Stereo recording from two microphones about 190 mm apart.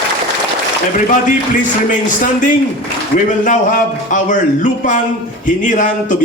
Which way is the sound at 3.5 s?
40° left (ahead or behind).